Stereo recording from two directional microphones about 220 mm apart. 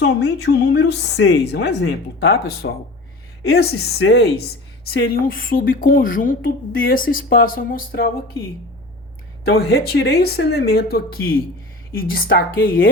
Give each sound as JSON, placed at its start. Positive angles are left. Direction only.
{"t": 0.0, "sound": "a woman's voice", "side_deg": 50}
{"t": 9.4, "sound": "a woman's voice", "side_deg": 45}